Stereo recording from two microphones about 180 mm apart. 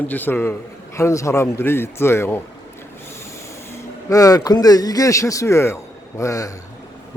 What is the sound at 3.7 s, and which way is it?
Speech, 20° left (ahead or behind).